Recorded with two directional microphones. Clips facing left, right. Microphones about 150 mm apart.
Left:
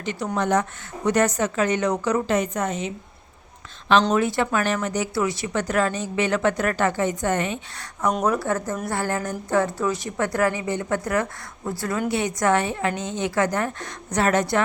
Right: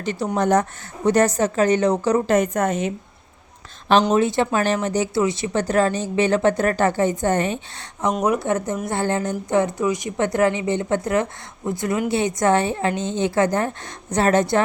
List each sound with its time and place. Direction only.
0.0 s speech: 35° right (ahead or behind)
2.2 s a woman's voice: 50° right (ahead or behind)
4.1 s speech: 25° right (ahead or behind)
8.2 s a woman's voice: 20° right (ahead or behind)